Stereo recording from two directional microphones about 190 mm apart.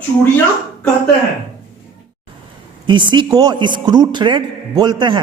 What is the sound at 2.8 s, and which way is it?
A woman's voice, 25° right (ahead or behind).